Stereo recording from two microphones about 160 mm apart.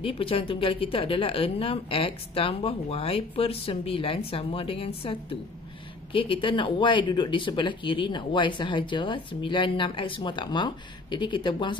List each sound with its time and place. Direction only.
0.0 s speech: 35° left (ahead or behind)